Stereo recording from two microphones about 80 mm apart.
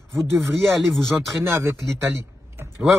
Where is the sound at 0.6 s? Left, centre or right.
Centre.